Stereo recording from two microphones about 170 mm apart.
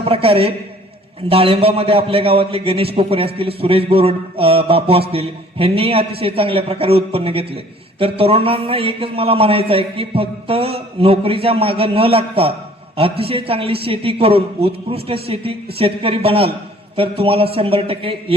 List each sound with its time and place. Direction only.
0.0 s a man's voice: 35° right (ahead or behind)